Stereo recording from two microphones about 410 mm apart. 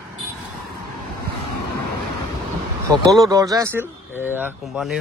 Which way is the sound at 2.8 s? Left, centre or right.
Centre.